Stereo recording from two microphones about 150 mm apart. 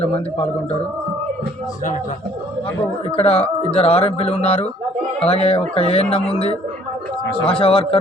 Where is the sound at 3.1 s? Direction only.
40° left (ahead or behind).